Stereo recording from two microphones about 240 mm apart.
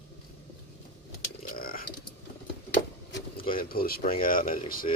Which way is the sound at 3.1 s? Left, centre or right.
Left.